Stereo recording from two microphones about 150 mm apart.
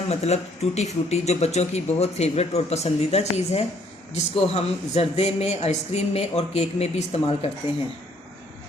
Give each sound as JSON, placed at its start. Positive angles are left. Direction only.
{"t": 0.1, "sound": "speech", "side_deg": 45}